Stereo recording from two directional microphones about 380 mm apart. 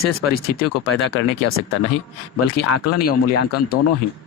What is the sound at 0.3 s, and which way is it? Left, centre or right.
Speech, left.